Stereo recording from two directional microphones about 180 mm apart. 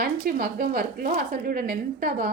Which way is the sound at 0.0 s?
50° right (ahead or behind).